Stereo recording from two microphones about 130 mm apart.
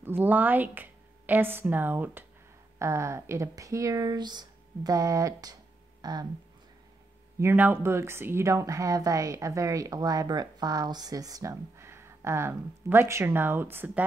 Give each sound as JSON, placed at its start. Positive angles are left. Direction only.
{"t": 0.0, "sound": "a woman's voice", "side_deg": -15}
{"t": 7.3, "sound": "a woman's voice", "side_deg": -15}